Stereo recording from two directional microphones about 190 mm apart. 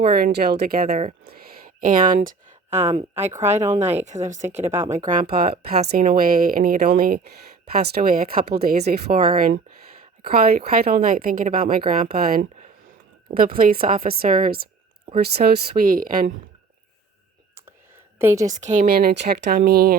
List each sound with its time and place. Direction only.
0.1 s speech: 60° right (ahead or behind); by 4.4 s 40° right (ahead or behind)
4.4 s speech: 10° right (ahead or behind)
4.9 s speech: 40° right (ahead or behind)
18.2 s a woman's voice: 10° right (ahead or behind)
18.4 s speech: 40° right (ahead or behind)